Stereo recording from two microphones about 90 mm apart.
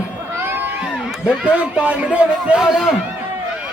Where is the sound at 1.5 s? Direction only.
15° right (ahead or behind).